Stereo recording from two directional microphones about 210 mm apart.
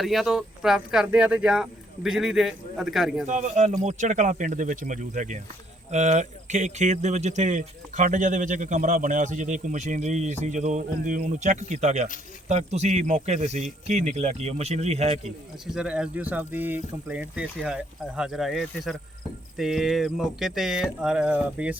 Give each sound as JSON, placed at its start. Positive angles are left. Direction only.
{"t": 0.0, "sound": "speech", "side_deg": 0}
{"t": 3.2, "sound": "speech", "side_deg": -35}
{"t": 15.6, "sound": "speech", "side_deg": -5}